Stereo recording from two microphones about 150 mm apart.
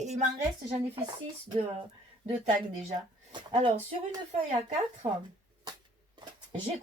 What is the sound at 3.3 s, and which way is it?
Speech, 30° right (ahead or behind).